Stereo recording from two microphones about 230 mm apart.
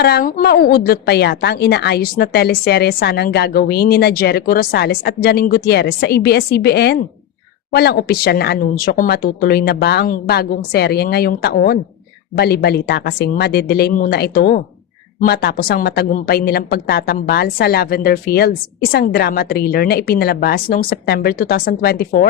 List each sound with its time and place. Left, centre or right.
0.0 s a woman's voice: left